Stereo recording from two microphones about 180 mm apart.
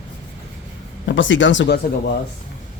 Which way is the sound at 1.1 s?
90° left.